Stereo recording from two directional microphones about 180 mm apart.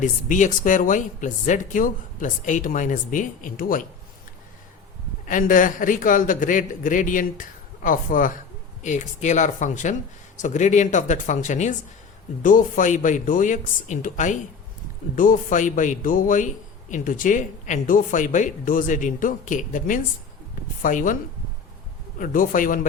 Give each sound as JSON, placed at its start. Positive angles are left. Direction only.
{"t": 0.0, "sound": "speech", "side_deg": 45}
{"t": 5.3, "sound": "speech", "side_deg": 45}
{"t": 22.2, "sound": "speech", "side_deg": 50}